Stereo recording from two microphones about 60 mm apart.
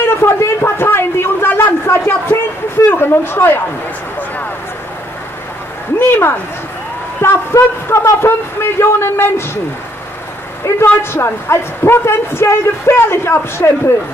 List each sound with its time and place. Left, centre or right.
0.0 s speech: left
0.8 s a sound: left
2.9 s speech: left
5.9 s speech: left
10.6 s a woman's voice: left
11.0 s speech: left